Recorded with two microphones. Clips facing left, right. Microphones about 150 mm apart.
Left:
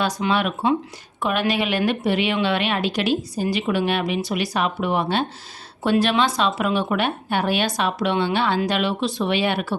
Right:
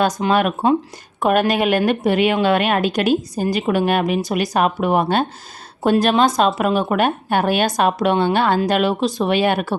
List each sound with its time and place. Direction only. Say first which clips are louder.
0.0 s speech: right 5 dB; 45° right (ahead or behind)